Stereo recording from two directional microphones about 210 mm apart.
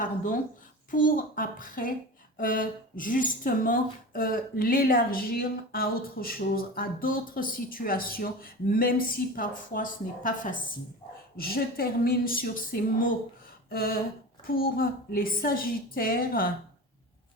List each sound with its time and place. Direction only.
0.9 s a woman's voice: 40° left (ahead or behind)
13.7 s a sound: 45° left (ahead or behind)
14.4 s speech: 45° left (ahead or behind)